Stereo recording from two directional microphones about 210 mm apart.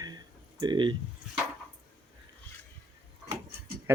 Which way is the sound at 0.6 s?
20° right (ahead or behind).